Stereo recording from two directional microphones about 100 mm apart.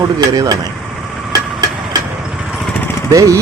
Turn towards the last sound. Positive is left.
turn(degrees=-35)  # may be behind; listen again after turning